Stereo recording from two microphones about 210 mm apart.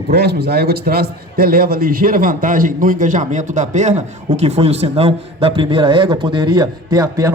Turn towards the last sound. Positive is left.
turn(degrees=-15)  # may be behind; listen again after turning